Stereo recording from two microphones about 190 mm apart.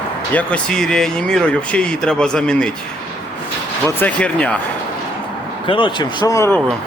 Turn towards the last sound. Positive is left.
turn(degrees=15)  # may be behind; listen again after turning